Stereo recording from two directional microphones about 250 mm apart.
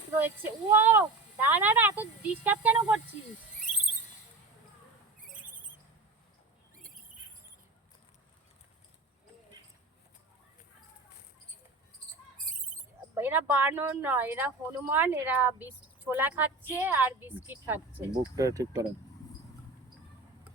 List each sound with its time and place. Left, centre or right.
0.2 s speech: centre
12.5 s a sound: right
13.1 s speech: centre